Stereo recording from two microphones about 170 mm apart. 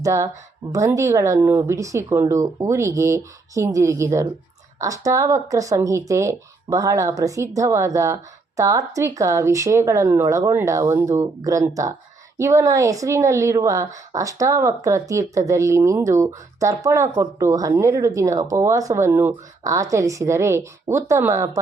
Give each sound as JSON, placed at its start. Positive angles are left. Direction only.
{"t": 0.0, "sound": "a woman's voice", "side_deg": -20}